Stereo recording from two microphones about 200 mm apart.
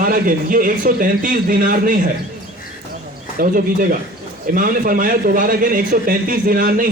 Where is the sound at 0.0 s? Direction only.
45° right (ahead or behind).